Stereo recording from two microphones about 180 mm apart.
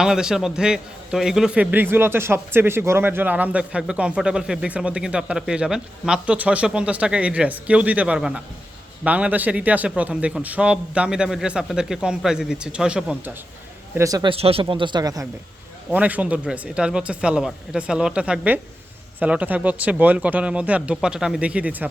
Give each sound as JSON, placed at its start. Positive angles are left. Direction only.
{"t": 0.0, "sound": "a man's voice", "side_deg": -5}
{"t": 13.9, "sound": "speech", "side_deg": -20}
{"t": 15.9, "sound": "a man's voice", "side_deg": -10}